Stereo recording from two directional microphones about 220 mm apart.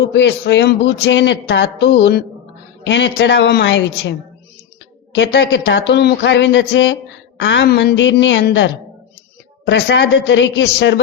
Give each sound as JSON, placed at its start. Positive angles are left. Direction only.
{"t": 0.1, "sound": "speech", "side_deg": 55}
{"t": 5.1, "sound": "speech", "side_deg": 55}